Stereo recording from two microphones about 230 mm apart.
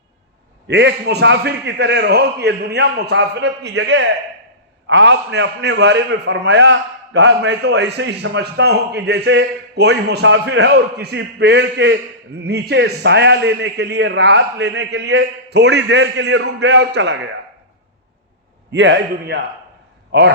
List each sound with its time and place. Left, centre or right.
0.7 s a man's voice: right
18.7 s a man's voice: right